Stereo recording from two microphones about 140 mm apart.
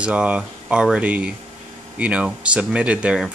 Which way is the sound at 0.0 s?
10° right (ahead or behind).